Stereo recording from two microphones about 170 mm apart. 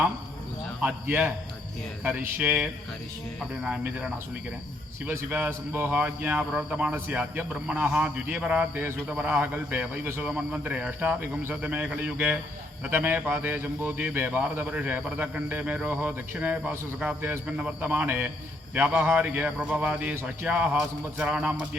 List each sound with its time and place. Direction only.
0.8 s speech: 10° right (ahead or behind)
2.4 s speech: 10° right (ahead or behind)
3.6 s cricket: 5° right (ahead or behind)
5.0 s speech: 10° right (ahead or behind)